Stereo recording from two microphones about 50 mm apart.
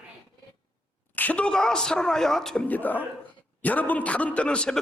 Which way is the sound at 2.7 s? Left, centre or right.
Left.